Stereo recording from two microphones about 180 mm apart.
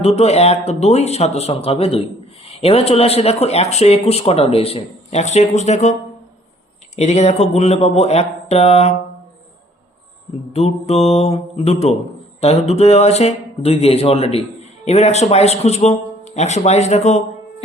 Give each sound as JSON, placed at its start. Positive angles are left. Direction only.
{"t": 0.0, "sound": "speech", "side_deg": 35}
{"t": 10.5, "sound": "speech", "side_deg": 35}